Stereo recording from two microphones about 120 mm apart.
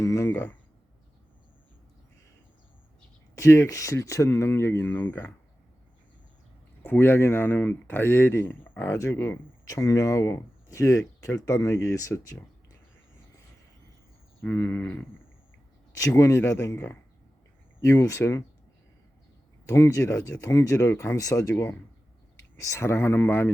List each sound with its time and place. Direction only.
0.0 s speech: 25° left (ahead or behind)
3.3 s speech: 25° left (ahead or behind)
6.8 s speech: 20° left (ahead or behind)
14.4 s speech: 15° left (ahead or behind)
16.0 s speech: 25° left (ahead or behind)
19.6 s speech: 25° left (ahead or behind)
22.6 s speech: 25° left (ahead or behind)